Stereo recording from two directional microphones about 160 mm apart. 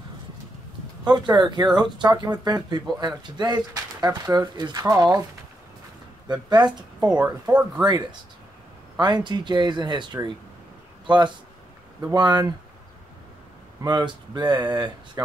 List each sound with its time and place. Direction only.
1.0 s speech: 25° right (ahead or behind)
6.2 s speech: 25° right (ahead or behind)
7.1 s speech: 10° right (ahead or behind)
7.8 s speech: 25° right (ahead or behind)
13.7 s speech: 25° right (ahead or behind)